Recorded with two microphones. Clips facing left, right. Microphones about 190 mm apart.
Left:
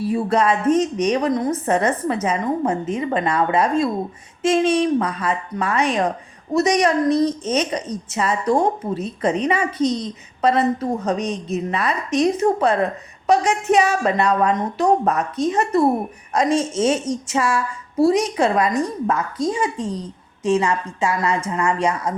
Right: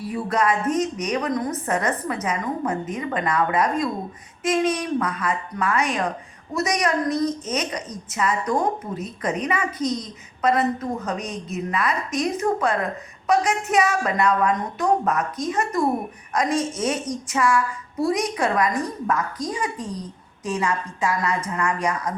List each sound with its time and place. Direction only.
0.0 s a woman's voice: 30° left (ahead or behind)